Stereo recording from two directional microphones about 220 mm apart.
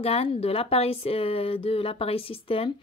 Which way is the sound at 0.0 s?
25° left (ahead or behind).